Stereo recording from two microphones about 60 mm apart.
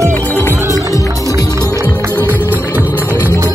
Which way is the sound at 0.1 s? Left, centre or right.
Left.